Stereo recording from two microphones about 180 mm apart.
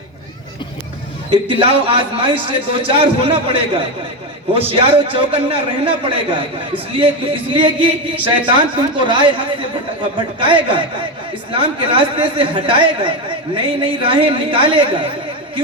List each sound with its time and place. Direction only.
1.3 s a man's voice: 30° right (ahead or behind)